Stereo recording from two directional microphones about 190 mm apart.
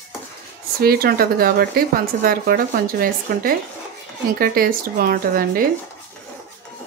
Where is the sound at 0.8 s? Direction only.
50° right (ahead or behind).